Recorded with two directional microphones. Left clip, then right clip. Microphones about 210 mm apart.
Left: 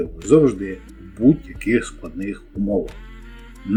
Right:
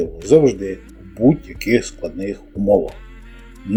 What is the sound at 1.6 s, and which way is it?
Speech, 15° right (ahead or behind).